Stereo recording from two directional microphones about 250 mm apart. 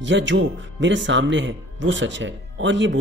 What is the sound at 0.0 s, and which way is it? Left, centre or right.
Speech, right.